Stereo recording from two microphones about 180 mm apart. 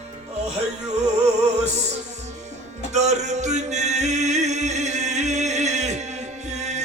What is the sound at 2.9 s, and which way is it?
Music, 40° right (ahead or behind).